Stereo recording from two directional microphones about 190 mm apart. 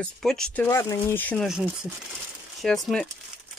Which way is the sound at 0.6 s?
15° left (ahead or behind).